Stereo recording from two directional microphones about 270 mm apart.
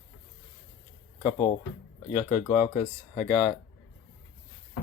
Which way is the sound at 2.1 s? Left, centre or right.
Centre.